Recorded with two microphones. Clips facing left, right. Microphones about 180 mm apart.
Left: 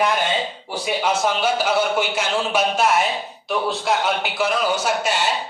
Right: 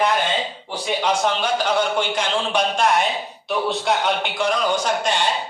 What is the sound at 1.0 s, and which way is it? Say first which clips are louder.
A man's voice: left 1 dB; 5° left (ahead or behind).